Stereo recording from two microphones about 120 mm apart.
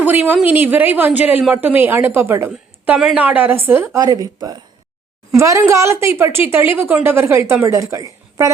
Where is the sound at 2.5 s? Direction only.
5° right (ahead or behind).